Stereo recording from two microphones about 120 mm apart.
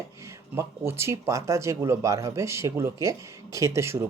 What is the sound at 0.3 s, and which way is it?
Speech, 25° right (ahead or behind).